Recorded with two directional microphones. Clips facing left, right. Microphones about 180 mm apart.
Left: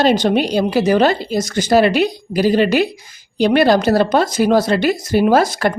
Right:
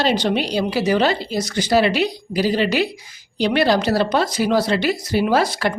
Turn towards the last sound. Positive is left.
turn(degrees=45)  # may be behind; listen again after turning